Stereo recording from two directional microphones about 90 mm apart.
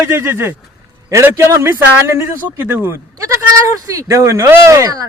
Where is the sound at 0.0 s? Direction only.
25° right (ahead or behind).